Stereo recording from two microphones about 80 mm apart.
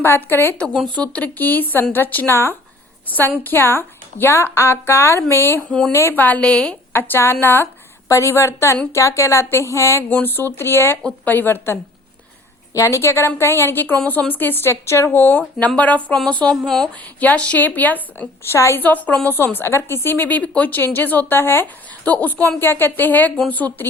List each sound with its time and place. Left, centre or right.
0.0 s a woman's voice: left
0.9 s a woman's voice: centre
6.9 s a woman's voice: left
10.1 s a woman's voice: left
12.7 s a woman's voice: left
13.8 s a woman's voice: centre
16.6 s a woman's voice: centre
17.0 s a woman's voice: centre
18.5 s a woman's voice: left
18.8 s a woman's voice: left